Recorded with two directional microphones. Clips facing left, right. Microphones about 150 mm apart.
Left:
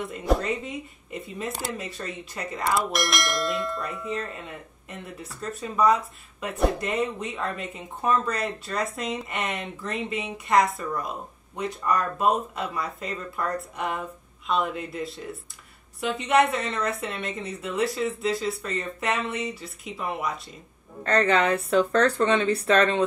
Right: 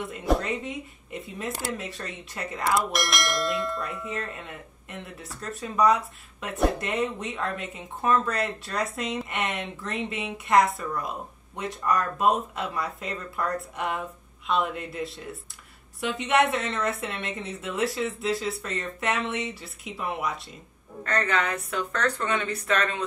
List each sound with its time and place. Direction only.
0.0 s speech: centre (ahead or behind)
21.0 s a woman's voice: 30° left (ahead or behind)